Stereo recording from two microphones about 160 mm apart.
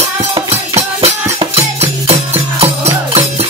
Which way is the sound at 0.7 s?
40° right (ahead or behind).